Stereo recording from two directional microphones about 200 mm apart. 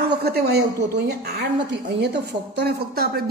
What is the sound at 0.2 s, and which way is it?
Speech, 55° right (ahead or behind).